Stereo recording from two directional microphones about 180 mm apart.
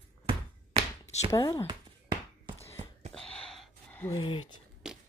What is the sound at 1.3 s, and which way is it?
Speech, 15° left (ahead or behind).